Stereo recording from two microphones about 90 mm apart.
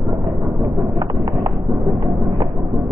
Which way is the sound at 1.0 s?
45° right (ahead or behind).